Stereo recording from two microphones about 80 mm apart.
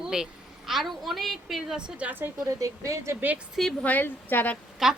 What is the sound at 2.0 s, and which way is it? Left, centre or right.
Speech, centre.